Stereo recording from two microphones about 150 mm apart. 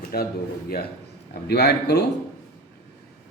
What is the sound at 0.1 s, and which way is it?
Speech, 90° left.